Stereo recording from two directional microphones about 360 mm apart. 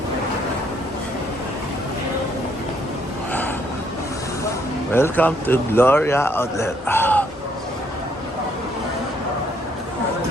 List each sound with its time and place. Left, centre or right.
4.9 s a man's voice: centre